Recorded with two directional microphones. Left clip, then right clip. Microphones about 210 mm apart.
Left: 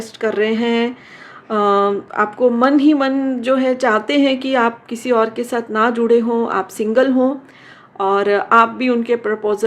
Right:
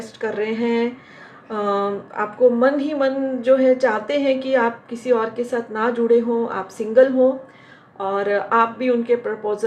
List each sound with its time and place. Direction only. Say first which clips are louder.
0.0 s a woman's voice: left 6 dB; 55° left (ahead or behind)